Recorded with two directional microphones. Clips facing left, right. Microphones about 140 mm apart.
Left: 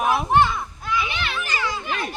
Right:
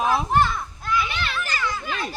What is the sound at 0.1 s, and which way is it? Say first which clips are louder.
Children playing: left 2 dB; 15° left (ahead or behind).